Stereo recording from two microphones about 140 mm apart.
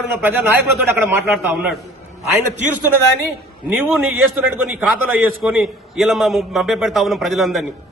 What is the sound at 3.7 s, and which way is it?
A man's voice, 5° right (ahead or behind).